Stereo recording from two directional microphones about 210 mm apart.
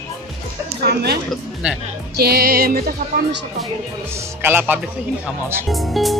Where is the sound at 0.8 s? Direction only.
50° right (ahead or behind).